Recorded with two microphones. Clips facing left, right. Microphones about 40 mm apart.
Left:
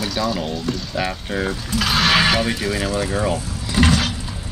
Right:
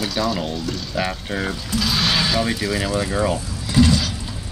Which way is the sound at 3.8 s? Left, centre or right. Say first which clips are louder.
Left 2 dB; left.